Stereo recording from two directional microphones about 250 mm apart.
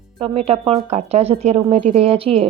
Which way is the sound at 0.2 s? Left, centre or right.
Right.